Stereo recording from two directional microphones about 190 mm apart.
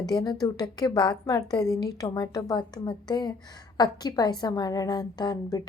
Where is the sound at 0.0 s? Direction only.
20° left (ahead or behind).